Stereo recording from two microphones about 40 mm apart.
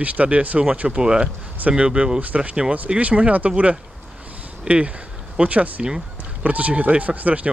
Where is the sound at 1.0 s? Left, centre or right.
Centre; by 3.5 s right.